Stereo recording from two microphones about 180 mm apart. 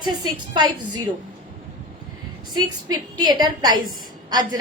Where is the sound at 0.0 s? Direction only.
25° right (ahead or behind).